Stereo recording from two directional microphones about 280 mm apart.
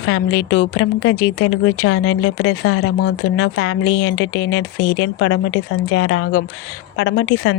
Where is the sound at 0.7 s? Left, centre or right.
Left.